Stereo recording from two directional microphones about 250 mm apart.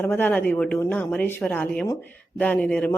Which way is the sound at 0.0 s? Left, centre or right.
Centre.